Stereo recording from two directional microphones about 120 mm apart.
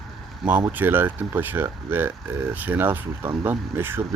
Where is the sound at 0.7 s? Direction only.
15° right (ahead or behind).